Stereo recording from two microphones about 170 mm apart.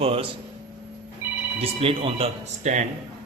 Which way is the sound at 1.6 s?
35° right (ahead or behind).